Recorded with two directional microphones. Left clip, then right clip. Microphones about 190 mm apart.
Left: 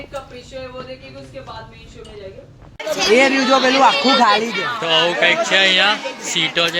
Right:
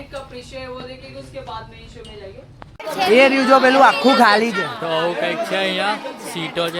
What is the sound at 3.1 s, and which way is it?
Speech, 15° right (ahead or behind).